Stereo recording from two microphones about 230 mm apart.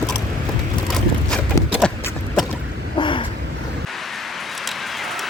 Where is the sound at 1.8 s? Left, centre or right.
Centre.